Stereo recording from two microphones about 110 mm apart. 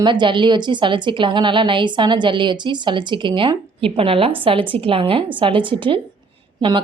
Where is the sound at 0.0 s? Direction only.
45° right (ahead or behind).